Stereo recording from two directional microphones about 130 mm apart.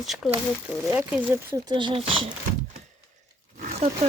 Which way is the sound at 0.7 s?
15° right (ahead or behind).